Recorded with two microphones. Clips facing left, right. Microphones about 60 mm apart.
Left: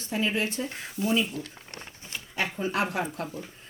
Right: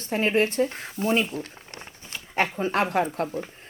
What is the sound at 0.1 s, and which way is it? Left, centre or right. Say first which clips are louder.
Speech: right 5 dB; right.